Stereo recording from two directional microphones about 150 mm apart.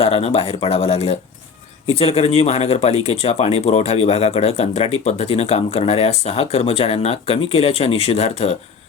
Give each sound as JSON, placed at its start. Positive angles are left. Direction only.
{"t": 0.0, "sound": "speech", "side_deg": 40}